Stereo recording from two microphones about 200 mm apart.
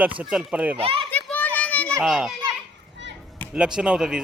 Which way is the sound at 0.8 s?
25° right (ahead or behind).